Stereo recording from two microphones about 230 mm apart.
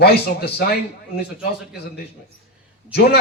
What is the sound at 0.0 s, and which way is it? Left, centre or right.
Speech, left.